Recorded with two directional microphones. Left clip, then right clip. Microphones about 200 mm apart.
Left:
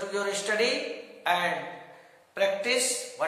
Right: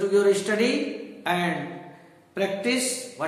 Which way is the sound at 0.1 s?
5° right (ahead or behind).